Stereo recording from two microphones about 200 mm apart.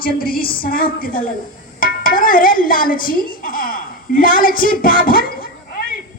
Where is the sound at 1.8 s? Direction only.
45° left (ahead or behind).